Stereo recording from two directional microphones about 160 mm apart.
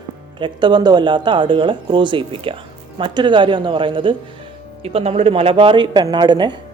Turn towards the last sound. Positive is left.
turn(degrees=-30)  # may be behind; listen again after turning